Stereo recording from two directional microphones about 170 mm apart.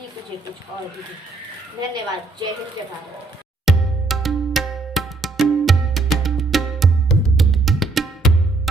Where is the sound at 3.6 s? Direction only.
Centre (ahead or behind).